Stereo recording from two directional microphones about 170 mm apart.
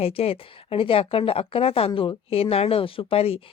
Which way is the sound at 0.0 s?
35° left (ahead or behind).